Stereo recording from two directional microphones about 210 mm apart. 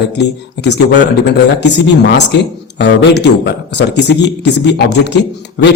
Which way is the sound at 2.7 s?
55° left (ahead or behind).